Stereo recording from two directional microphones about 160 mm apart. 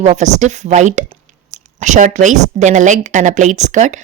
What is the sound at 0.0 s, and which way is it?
A woman's voice, 45° right (ahead or behind).